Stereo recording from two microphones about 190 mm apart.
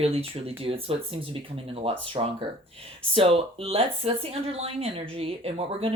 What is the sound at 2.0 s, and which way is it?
Speech, 25° right (ahead or behind).